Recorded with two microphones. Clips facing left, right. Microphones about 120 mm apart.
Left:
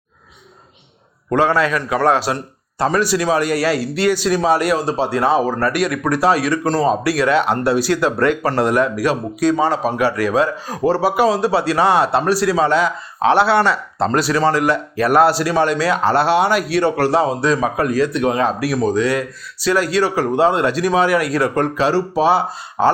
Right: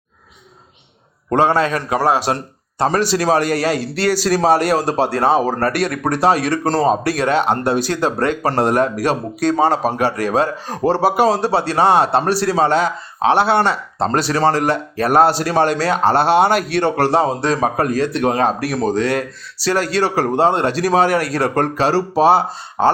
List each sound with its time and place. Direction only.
1.4 s speech: 25° right (ahead or behind)
2.7 s speech: 30° right (ahead or behind)
4.1 s speech: 40° right (ahead or behind)
16.5 s a man's voice: 60° right (ahead or behind)
16.8 s speech: 30° right (ahead or behind)